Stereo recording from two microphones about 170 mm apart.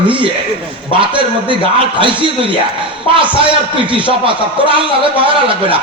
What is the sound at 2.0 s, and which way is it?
A man's voice, 30° right (ahead or behind).